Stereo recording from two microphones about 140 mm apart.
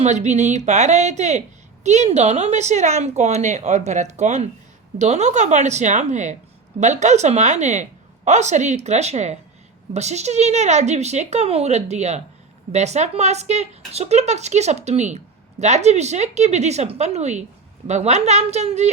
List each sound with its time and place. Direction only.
0.0 s a woman's voice: 55° right (ahead or behind)